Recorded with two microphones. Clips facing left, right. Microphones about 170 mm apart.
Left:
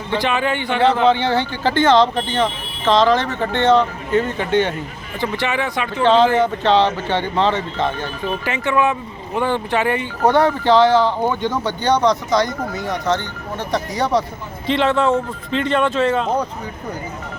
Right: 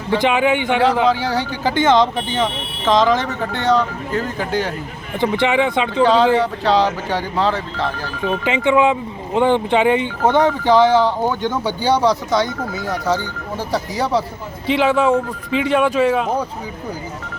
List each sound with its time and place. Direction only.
0.2 s speech: 15° right (ahead or behind)
5.2 s speech: 15° right (ahead or behind)
6.0 s speech: 10° right (ahead or behind)
8.4 s speech: 15° right (ahead or behind)
11.3 s speech: 5° right (ahead or behind)